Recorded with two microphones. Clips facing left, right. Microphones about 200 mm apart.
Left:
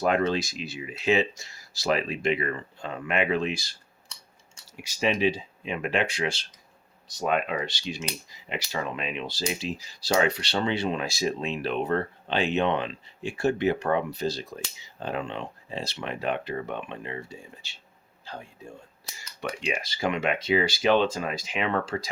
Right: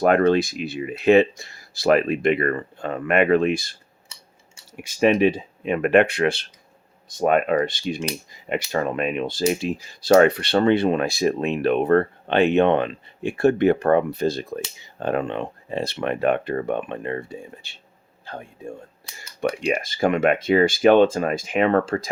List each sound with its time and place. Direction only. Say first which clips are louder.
0.0 s speech: right 7 dB; 60° right (ahead or behind)
4.8 s speech: right 8 dB; 55° right (ahead or behind)